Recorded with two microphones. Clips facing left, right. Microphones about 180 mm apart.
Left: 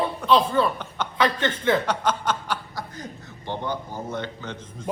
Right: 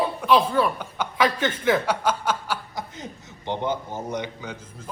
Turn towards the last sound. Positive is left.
turn(degrees=-10)  # may be behind; listen again after turning